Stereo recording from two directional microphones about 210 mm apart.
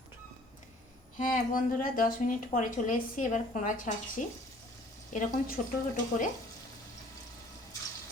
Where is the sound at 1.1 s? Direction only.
40° left (ahead or behind).